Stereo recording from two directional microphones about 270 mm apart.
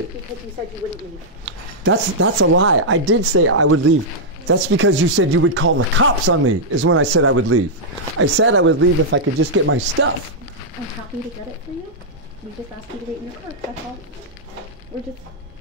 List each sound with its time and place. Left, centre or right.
1.4 s speech: right